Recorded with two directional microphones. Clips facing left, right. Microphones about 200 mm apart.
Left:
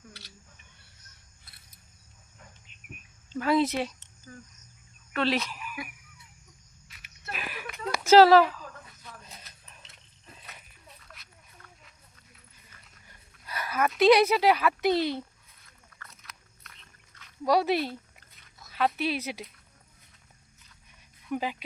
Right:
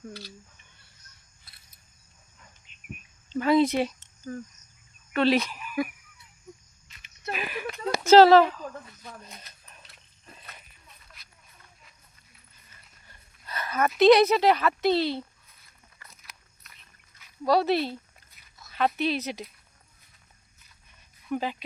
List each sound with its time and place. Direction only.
3.2 s speech: centre (ahead or behind)
4.3 s speech: 45° right (ahead or behind)
5.1 s speech: centre (ahead or behind)
6.8 s a sound: 5° left (ahead or behind)
8.0 s speech: 5° left (ahead or behind)
13.1 s a sound: 10° left (ahead or behind)
14.0 s a woman's voice: 10° left (ahead or behind)
16.0 s dog: 10° right (ahead or behind)
17.4 s a woman's voice: 10° left (ahead or behind)
21.3 s a woman's voice: 10° left (ahead or behind)